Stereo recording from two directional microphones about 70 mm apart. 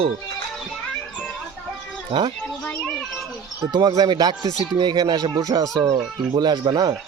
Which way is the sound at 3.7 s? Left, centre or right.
Right.